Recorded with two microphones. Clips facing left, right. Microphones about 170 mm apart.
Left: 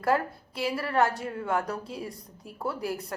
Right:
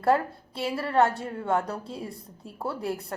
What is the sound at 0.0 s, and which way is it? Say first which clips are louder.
A woman's voice: right 3 dB; 25° right (ahead or behind).